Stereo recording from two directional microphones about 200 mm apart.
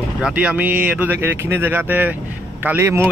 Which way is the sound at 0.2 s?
5° right (ahead or behind).